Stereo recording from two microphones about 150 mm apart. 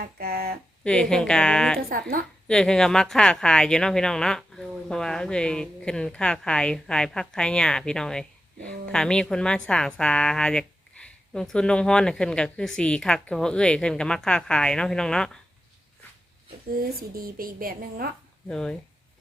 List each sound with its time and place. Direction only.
0.0 s speech: 90° right
0.9 s speech: 5° left (ahead or behind)
1.9 s a woman's voice: 70° right (ahead or behind)
2.5 s speech: 5° left (ahead or behind)
17.2 s a woman's voice: 75° right (ahead or behind)
18.4 s speech: 5° left (ahead or behind)